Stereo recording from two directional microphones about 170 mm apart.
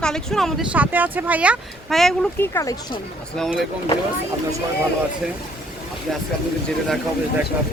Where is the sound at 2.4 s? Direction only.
15° left (ahead or behind).